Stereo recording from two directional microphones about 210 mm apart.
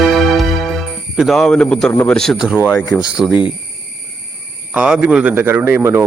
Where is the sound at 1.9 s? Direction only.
5° left (ahead or behind).